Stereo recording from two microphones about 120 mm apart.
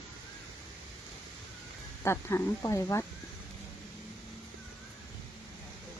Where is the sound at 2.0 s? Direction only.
25° left (ahead or behind).